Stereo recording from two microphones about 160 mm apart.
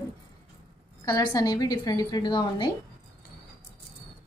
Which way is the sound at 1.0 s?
25° left (ahead or behind).